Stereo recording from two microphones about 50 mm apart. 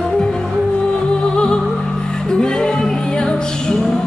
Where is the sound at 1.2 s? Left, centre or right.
Centre.